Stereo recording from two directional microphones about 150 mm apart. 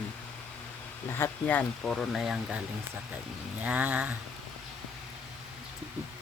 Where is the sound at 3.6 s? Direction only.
10° right (ahead or behind).